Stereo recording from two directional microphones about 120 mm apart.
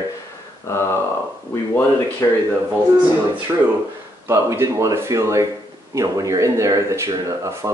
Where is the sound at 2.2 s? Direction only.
20° left (ahead or behind).